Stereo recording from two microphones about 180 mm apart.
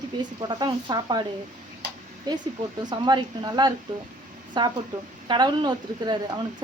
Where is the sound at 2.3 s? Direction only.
20° right (ahead or behind).